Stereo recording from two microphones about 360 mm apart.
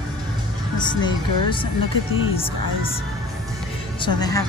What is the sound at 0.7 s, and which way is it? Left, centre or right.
Speech, centre.